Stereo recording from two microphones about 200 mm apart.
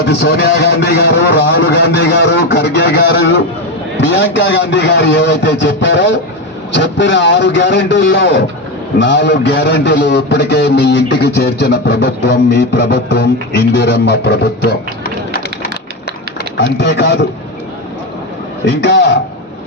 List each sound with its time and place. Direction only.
0.0 s a man's voice: 55° left (ahead or behind)
18.6 s a man's voice: 60° left (ahead or behind)